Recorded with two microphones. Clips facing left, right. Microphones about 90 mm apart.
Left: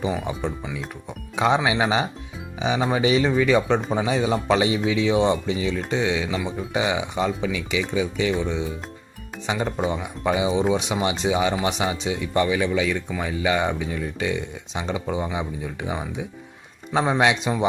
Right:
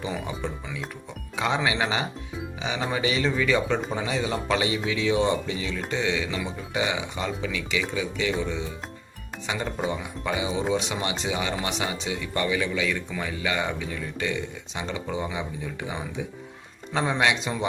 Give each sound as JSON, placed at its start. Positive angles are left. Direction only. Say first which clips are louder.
{"t": 1.4, "sound": "speech", "louder": "left 5 dB", "side_deg": 20}
{"t": 9.6, "sound": "speech", "louder": "left 2 dB", "side_deg": 5}
{"t": 9.9, "sound": "speech", "louder": "left 5 dB", "side_deg": 20}